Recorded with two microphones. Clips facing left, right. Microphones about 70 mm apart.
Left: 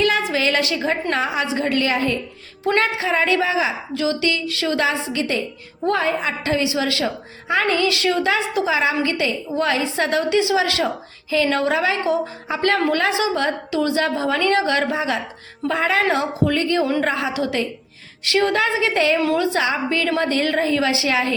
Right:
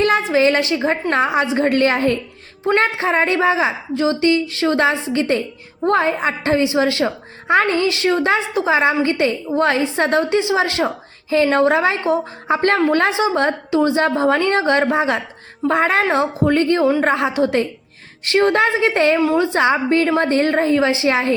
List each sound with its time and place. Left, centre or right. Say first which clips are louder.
0.0 s a woman's voice: right 4 dB; right